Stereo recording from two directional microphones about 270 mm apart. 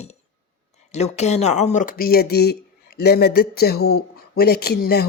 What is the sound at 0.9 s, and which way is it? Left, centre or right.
Speech, left.